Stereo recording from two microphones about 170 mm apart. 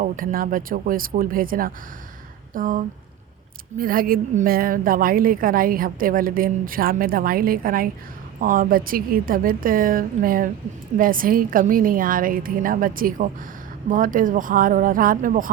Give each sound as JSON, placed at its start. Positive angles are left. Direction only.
{"t": 0.0, "sound": "a woman's voice", "side_deg": -55}